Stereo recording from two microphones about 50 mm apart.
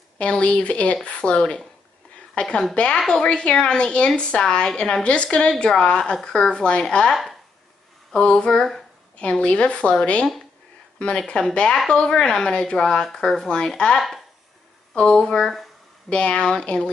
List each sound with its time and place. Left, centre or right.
0.2 s a woman's voice: left; by 8.8 s centre
9.2 s a woman's voice: left
13.9 s speech: centre
15.0 s a woman's voice: centre